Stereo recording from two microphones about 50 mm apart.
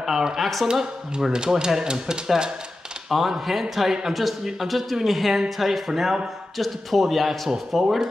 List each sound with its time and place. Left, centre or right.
0.0 s a man's voice: centre
0.7 s speech: centre
3.1 s a man's voice: centre